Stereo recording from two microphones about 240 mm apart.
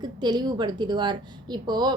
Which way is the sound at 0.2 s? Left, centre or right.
Centre.